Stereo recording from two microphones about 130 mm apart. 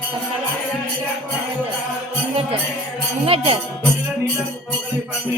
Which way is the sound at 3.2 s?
50° right (ahead or behind).